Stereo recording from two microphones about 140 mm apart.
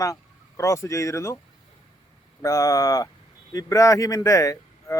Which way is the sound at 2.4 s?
25° left (ahead or behind).